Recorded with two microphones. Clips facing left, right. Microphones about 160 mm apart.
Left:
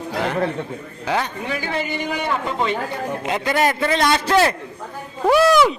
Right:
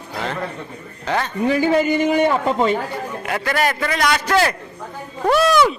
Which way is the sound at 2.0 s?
50° right (ahead or behind).